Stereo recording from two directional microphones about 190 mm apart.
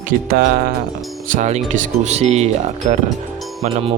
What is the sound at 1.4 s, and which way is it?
Speech, 40° right (ahead or behind).